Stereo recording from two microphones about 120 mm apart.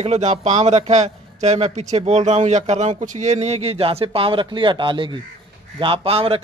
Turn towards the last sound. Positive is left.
turn(degrees=-50)  # may be behind; listen again after turning